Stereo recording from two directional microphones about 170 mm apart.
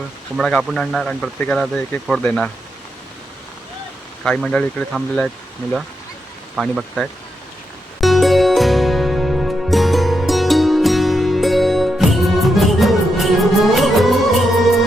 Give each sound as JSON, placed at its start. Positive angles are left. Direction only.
{"t": 0.3, "sound": "speech", "side_deg": 0}
{"t": 4.2, "sound": "speech", "side_deg": 5}
{"t": 6.6, "sound": "speech", "side_deg": 0}
{"t": 8.0, "sound": "music", "side_deg": 0}